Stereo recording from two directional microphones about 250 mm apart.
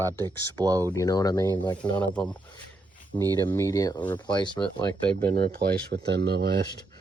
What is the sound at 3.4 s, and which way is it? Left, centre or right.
Speech, centre.